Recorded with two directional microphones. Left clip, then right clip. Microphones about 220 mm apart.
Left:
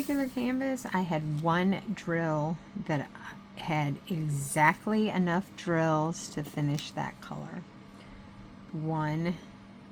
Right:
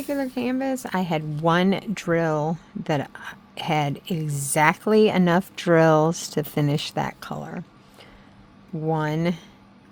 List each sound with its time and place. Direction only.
0.1 s speech: 45° right (ahead or behind)
8.9 s speech: 50° right (ahead or behind)